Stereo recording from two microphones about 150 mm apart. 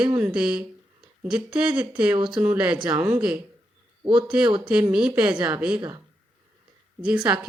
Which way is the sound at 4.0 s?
35° right (ahead or behind).